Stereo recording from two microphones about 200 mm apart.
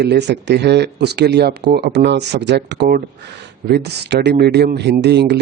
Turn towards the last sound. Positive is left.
turn(degrees=-60)  # may be behind; listen again after turning